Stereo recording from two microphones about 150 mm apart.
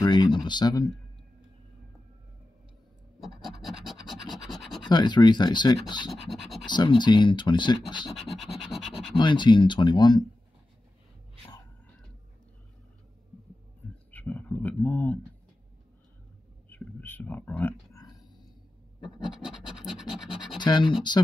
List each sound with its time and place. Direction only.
0.0 s speech: 30° left (ahead or behind)
3.2 s scratch: centre (ahead or behind)
4.8 s speech: 30° left (ahead or behind)
8.1 s scratch: centre (ahead or behind)
9.1 s speech: 30° left (ahead or behind)
14.1 s speech: 10° left (ahead or behind)
16.6 s a sound: 10° left (ahead or behind)
17.9 s a sound: 25° left (ahead or behind)
19.0 s scratch: 5° right (ahead or behind)
20.5 s speech: 30° left (ahead or behind)